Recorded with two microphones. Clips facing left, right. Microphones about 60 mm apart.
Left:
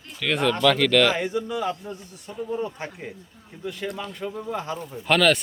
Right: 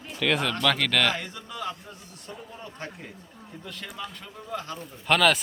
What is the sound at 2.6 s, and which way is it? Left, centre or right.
Speech, left.